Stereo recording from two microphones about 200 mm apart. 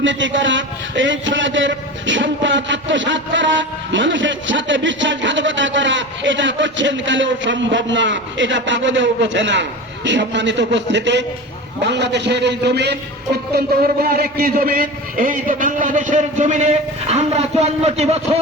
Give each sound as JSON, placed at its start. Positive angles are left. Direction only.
{"t": 0.0, "sound": "a man's voice", "side_deg": -65}